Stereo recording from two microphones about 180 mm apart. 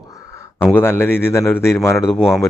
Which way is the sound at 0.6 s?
10° left (ahead or behind).